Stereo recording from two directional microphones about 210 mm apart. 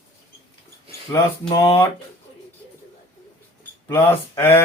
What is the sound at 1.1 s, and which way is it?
Speech, 20° left (ahead or behind).